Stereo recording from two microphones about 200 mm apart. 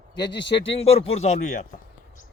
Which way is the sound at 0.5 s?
30° left (ahead or behind).